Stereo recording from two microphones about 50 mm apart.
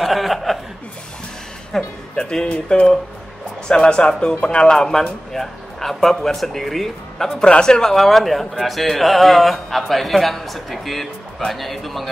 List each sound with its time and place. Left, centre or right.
0.0 s chuckle: centre
1.7 s speech: centre
3.6 s speech: centre
4.7 s a man's voice: centre
7.4 s speech: centre